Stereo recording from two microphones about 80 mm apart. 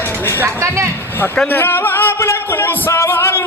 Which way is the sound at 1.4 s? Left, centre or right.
Left.